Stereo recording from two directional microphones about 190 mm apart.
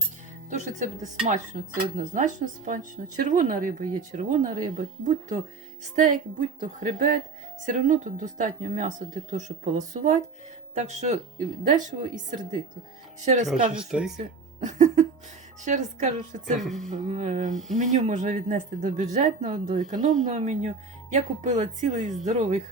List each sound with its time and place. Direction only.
0.5 s speech: 40° right (ahead or behind)
13.2 s speech: 40° right (ahead or behind)
13.7 s speech: 5° right (ahead or behind)
14.6 s speech: 40° right (ahead or behind)
16.6 s speech: centre (ahead or behind)
16.9 s speech: 35° right (ahead or behind)
17.5 s speech: centre (ahead or behind)
17.7 s speech: 40° right (ahead or behind)